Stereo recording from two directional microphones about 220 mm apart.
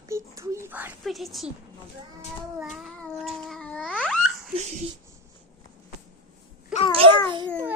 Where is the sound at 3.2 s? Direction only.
Centre (ahead or behind).